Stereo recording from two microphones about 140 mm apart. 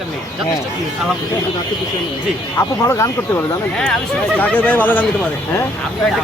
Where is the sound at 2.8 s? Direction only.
20° left (ahead or behind).